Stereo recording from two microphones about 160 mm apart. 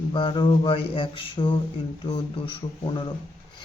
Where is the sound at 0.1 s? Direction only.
30° left (ahead or behind).